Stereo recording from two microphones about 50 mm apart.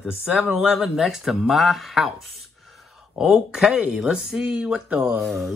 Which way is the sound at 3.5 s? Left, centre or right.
Centre.